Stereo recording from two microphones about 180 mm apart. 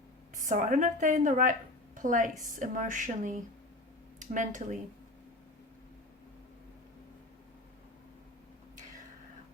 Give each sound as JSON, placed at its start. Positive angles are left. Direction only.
{"t": 0.3, "sound": "a woman's voice", "side_deg": -45}